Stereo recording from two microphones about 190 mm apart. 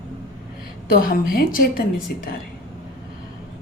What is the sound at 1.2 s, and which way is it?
A woman's voice, 50° left (ahead or behind).